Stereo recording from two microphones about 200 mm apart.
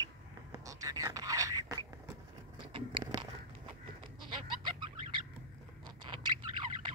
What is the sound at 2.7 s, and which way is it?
Biting, 25° right (ahead or behind).